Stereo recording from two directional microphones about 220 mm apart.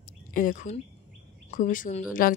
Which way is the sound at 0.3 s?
40° left (ahead or behind).